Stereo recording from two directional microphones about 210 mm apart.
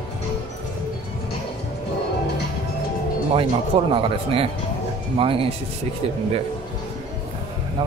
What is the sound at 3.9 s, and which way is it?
Speech, 25° right (ahead or behind).